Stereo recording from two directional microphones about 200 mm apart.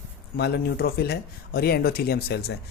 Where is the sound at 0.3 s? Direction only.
50° left (ahead or behind).